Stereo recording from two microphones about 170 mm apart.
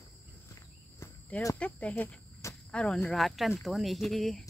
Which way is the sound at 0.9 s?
15° left (ahead or behind).